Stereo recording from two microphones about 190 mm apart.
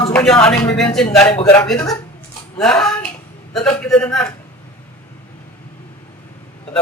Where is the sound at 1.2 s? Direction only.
15° left (ahead or behind).